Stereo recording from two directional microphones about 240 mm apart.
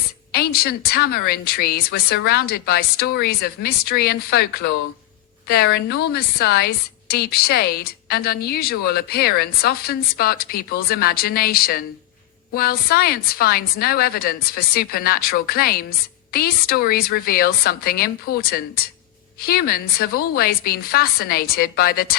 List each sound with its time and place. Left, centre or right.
0.3 s a woman's voice: left